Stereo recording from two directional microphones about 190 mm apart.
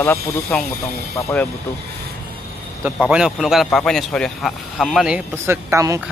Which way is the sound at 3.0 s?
5° right (ahead or behind).